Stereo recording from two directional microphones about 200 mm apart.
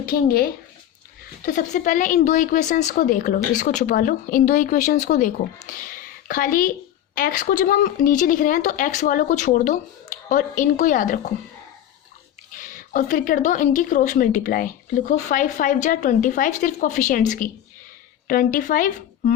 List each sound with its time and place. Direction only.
0.1 s speech: 45° left (ahead or behind)
1.5 s a woman's voice: 40° left (ahead or behind)
12.5 s a woman's voice: 40° left (ahead or behind)